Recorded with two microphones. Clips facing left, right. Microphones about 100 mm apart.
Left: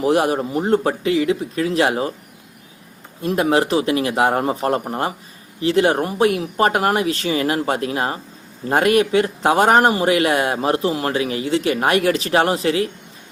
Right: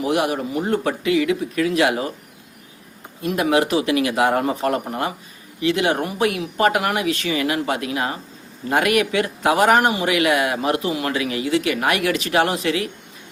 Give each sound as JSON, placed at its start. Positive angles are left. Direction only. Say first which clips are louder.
{"t": 0.0, "sound": "speech", "louder": "left 3 dB", "side_deg": 35}
{"t": 3.2, "sound": "speech", "louder": "left 1 dB", "side_deg": 30}